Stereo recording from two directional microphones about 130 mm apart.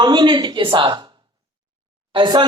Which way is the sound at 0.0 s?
35° right (ahead or behind).